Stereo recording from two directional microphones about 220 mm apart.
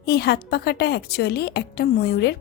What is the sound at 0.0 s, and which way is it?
A woman's voice, 50° left (ahead or behind).